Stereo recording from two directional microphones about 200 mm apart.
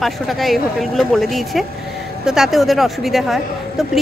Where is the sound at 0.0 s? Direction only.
Centre (ahead or behind).